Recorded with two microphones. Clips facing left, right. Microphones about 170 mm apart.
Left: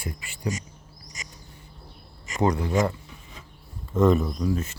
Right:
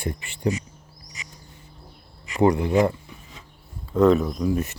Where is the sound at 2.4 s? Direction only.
15° right (ahead or behind).